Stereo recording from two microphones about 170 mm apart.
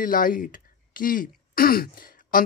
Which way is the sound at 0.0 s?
55° left (ahead or behind).